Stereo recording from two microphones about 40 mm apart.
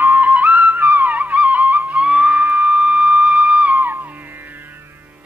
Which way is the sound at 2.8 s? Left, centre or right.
Right.